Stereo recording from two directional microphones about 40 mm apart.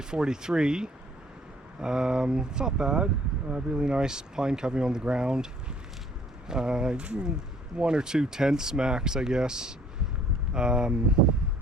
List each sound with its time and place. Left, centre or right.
0.0 s speech: centre
6.5 s speech: centre